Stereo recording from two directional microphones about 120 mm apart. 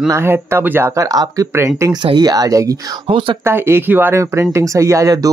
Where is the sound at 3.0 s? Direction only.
45° right (ahead or behind).